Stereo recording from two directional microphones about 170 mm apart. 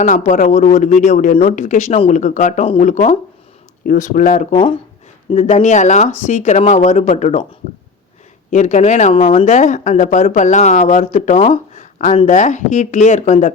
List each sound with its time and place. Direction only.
0.0 s speech: 45° left (ahead or behind)
5.3 s speech: 40° left (ahead or behind)
8.4 s speech: 45° left (ahead or behind)
9.1 s speech: 35° left (ahead or behind)
9.4 s speech: 45° left (ahead or behind)